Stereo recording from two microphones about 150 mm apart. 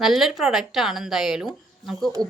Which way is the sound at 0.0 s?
Centre (ahead or behind).